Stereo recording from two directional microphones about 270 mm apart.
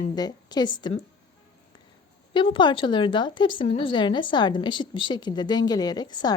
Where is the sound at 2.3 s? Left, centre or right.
Centre.